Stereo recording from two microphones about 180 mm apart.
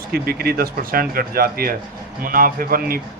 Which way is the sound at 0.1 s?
60° right (ahead or behind).